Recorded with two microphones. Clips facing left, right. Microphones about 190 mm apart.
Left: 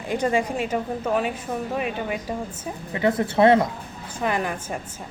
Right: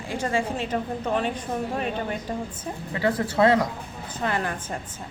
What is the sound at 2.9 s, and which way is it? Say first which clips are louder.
A woman's voice: left 3 dB; 20° left (ahead or behind).